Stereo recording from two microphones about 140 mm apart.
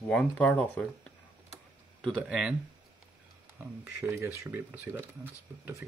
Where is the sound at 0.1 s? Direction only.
10° left (ahead or behind).